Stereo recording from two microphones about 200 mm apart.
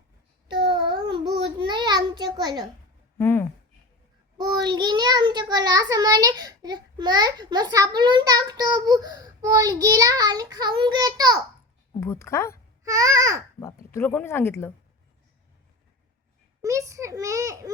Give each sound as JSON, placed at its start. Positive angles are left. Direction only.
{"t": 0.7, "sound": "child singing", "side_deg": -20}
{"t": 3.2, "sound": "speech", "side_deg": 10}
{"t": 4.4, "sound": "child singing", "side_deg": -20}
{"t": 4.7, "sound": "a child's voice", "side_deg": -20}
{"t": 11.9, "sound": "a woman's voice", "side_deg": 15}
{"t": 12.8, "sound": "a child's voice", "side_deg": -15}
{"t": 13.6, "sound": "speech", "side_deg": 15}
{"t": 16.6, "sound": "a child's voice", "side_deg": -15}